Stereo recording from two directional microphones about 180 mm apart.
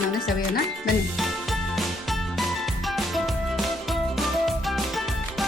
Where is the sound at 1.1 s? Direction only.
Centre (ahead or behind).